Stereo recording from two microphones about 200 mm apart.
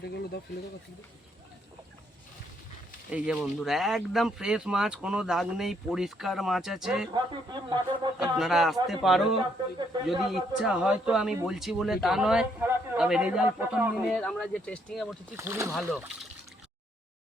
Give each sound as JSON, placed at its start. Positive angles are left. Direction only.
{"t": 0.0, "sound": "speech", "side_deg": 55}
{"t": 3.1, "sound": "a man's voice", "side_deg": -5}
{"t": 7.1, "sound": "speech", "side_deg": -20}
{"t": 8.2, "sound": "a man's voice", "side_deg": 0}
{"t": 15.4, "sound": "speech", "side_deg": -10}
{"t": 15.7, "sound": "a man's voice", "side_deg": 0}